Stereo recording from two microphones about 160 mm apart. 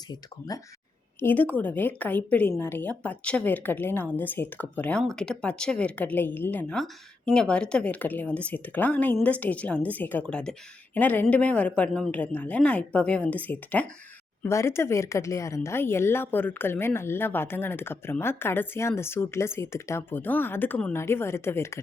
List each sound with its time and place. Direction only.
0.1 s speech: 25° left (ahead or behind)
1.2 s speech: 10° left (ahead or behind)